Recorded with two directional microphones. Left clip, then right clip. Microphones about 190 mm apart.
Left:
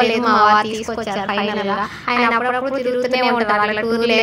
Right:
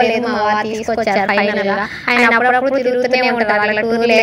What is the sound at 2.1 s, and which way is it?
A woman's voice, 15° right (ahead or behind).